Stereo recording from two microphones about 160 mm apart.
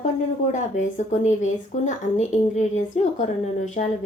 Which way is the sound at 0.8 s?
45° left (ahead or behind).